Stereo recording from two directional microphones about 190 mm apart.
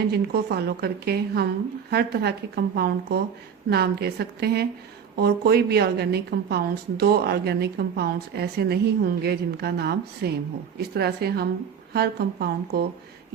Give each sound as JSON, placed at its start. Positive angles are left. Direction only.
{"t": 0.1, "sound": "a woman's voice", "side_deg": -55}